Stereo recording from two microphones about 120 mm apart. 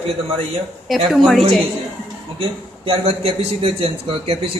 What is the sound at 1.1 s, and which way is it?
Speech, centre (ahead or behind).